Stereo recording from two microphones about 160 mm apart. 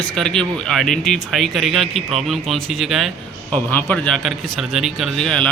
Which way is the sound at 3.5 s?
10° left (ahead or behind).